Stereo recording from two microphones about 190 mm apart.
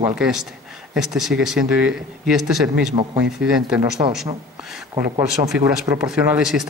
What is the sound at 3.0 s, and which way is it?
Speech, 25° right (ahead or behind).